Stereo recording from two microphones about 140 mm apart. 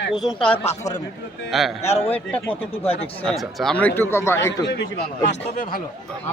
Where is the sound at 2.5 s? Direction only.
45° left (ahead or behind).